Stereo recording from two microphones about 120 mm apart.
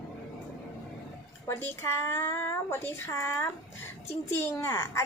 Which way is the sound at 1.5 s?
20° left (ahead or behind).